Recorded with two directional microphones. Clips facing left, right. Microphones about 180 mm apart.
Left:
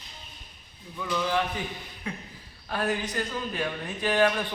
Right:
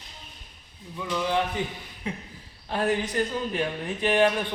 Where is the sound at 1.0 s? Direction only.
15° right (ahead or behind).